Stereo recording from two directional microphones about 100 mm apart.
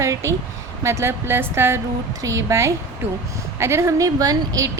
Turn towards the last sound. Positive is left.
turn(degrees=-40)  # may be behind; listen again after turning